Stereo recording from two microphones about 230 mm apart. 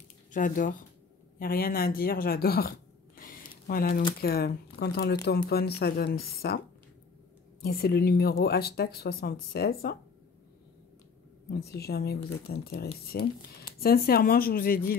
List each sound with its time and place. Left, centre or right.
0.3 s speech: left
7.6 s speech: left
11.5 s speech: left